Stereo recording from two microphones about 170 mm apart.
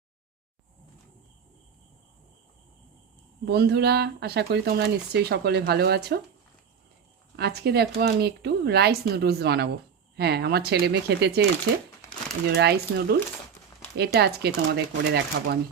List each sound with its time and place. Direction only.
3.4 s speech: 70° right (ahead or behind)
7.3 s speech: 70° right (ahead or behind)
12.5 s speech: 75° right (ahead or behind)